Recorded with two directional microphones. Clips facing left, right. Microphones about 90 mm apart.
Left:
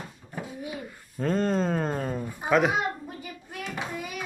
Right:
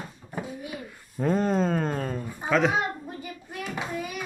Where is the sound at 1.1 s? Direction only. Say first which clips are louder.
Right 1 dB; 10° right (ahead or behind); by 2.7 s 10° left (ahead or behind).